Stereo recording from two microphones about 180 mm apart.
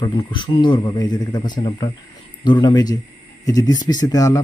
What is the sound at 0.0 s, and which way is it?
A man's voice, 25° left (ahead or behind).